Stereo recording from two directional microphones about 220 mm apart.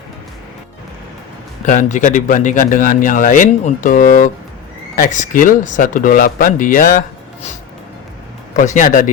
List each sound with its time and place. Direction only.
1.6 s speech: 35° left (ahead or behind)
8.5 s speech: 35° left (ahead or behind)